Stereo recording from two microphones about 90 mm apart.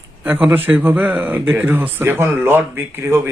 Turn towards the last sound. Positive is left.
turn(degrees=-25)  # may be behind; listen again after turning